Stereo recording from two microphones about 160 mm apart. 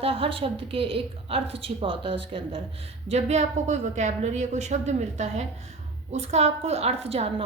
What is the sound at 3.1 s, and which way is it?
A woman's voice, 45° right (ahead or behind).